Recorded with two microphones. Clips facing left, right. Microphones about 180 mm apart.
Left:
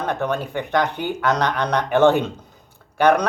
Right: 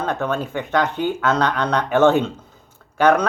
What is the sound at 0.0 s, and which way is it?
Speech, 15° left (ahead or behind).